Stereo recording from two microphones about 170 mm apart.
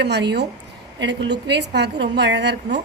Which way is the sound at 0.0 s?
85° right.